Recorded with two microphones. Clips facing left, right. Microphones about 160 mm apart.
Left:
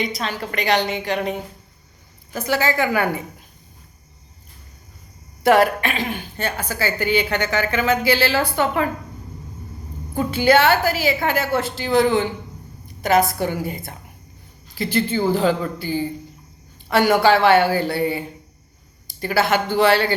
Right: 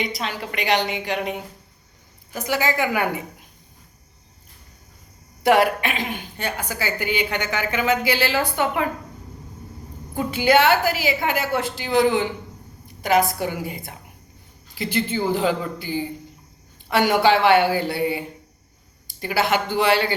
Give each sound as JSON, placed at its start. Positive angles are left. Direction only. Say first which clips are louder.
{"t": 0.1, "sound": "a woman's voice", "louder": "left 2 dB", "side_deg": -15}
{"t": 5.4, "sound": "a woman's voice", "louder": "left 2 dB", "side_deg": -15}
{"t": 10.2, "sound": "a woman's voice", "louder": "left 2 dB", "side_deg": -15}